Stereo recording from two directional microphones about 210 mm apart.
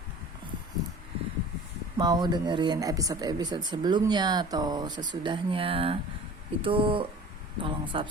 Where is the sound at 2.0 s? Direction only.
20° right (ahead or behind).